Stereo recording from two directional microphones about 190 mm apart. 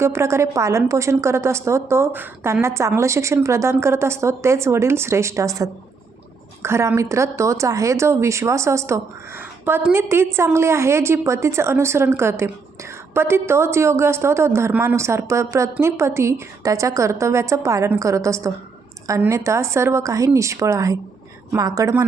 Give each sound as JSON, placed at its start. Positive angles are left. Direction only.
{"t": 0.0, "sound": "a woman's voice", "side_deg": -15}